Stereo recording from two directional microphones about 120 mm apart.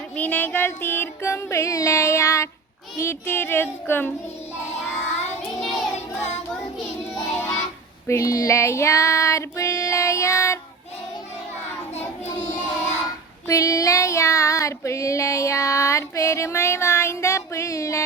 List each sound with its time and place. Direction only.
0.2 s music: 15° left (ahead or behind)
5.5 s child singing: centre (ahead or behind)
8.0 s child singing: 25° left (ahead or behind)
11.9 s child singing: 70° left (ahead or behind)
13.5 s child singing: 25° left (ahead or behind)